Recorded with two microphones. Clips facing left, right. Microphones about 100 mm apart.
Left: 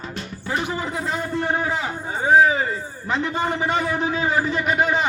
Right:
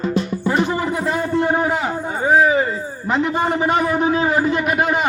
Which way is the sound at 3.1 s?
20° right (ahead or behind).